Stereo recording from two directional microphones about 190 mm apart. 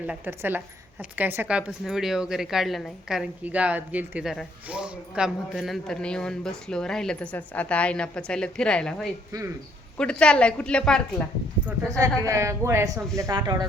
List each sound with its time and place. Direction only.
0.0 s a woman's voice: 10° right (ahead or behind)
9.3 s speech: 20° right (ahead or behind)
10.0 s a woman's voice: 5° left (ahead or behind)
11.6 s speech: 15° right (ahead or behind)